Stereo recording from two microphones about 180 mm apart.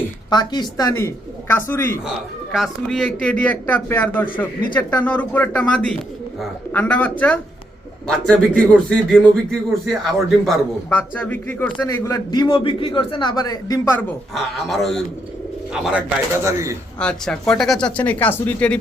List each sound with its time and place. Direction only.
0.3 s speech: 25° left (ahead or behind)
2.5 s a man's voice: centre (ahead or behind); by 13.7 s 20° left (ahead or behind)
14.3 s speech: centre (ahead or behind); by 16.7 s 15° right (ahead or behind)
17.0 s speech: 5° left (ahead or behind)